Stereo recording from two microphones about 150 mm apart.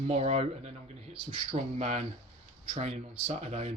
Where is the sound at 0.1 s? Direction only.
45° right (ahead or behind).